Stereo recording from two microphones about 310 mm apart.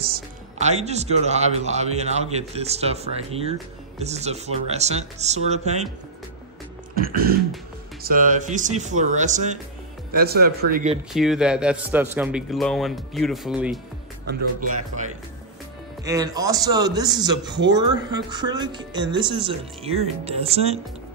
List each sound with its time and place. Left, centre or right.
0.0 s speech: right
7.0 s speech: right
11.1 s speech: centre
16.0 s speech: centre